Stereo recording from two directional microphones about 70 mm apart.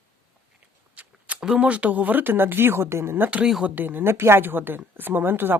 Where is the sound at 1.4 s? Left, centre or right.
Centre; by 3.4 s right.